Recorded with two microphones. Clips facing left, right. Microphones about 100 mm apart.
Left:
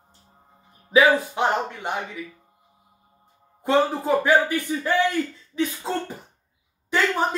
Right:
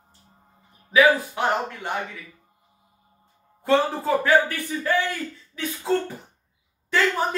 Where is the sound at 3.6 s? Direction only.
15° left (ahead or behind).